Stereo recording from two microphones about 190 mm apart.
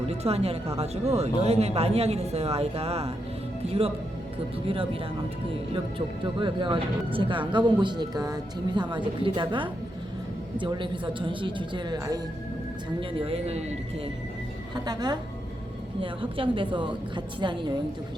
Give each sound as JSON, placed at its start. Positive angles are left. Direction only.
{"t": 0.1, "sound": "a woman's voice", "side_deg": -30}
{"t": 6.2, "sound": "speech", "side_deg": -25}
{"t": 14.8, "sound": "speech", "side_deg": -20}